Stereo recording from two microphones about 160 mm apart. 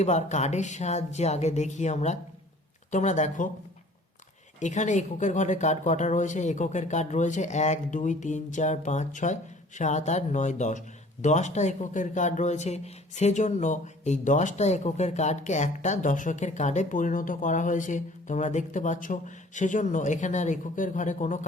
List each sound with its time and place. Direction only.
0.0 s speech: 45° left (ahead or behind)
4.6 s speech: 50° left (ahead or behind)